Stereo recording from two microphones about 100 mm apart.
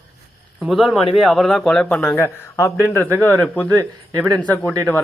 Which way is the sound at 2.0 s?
25° left (ahead or behind).